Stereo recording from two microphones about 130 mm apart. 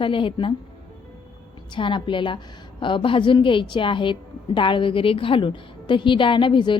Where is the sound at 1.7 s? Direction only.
40° left (ahead or behind).